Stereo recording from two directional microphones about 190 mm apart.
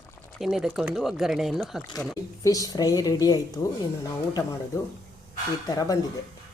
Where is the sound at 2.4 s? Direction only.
20° left (ahead or behind).